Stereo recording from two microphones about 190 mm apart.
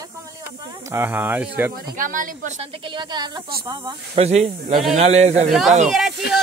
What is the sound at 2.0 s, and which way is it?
Speech, 45° right (ahead or behind).